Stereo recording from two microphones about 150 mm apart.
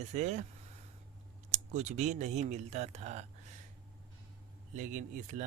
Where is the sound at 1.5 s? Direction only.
50° right (ahead or behind).